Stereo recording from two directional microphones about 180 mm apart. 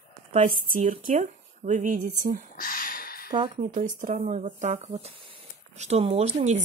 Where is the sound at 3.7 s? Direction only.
45° right (ahead or behind).